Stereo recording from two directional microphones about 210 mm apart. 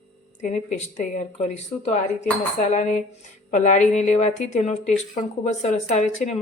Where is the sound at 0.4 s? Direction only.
35° left (ahead or behind).